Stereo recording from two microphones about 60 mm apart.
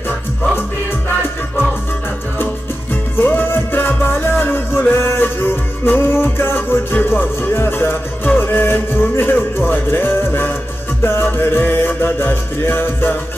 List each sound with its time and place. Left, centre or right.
2.9 s music: left